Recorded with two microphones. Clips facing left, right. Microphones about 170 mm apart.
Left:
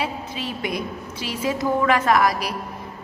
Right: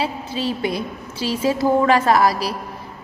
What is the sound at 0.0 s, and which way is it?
A woman's voice, 30° right (ahead or behind).